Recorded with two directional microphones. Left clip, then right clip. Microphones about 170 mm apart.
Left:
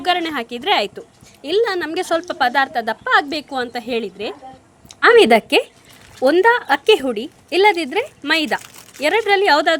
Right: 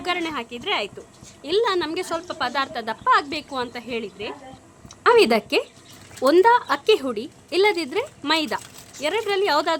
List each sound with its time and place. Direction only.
0.0 s a woman's voice: 20° left (ahead or behind)
1.4 s a woman's voice: 10° left (ahead or behind)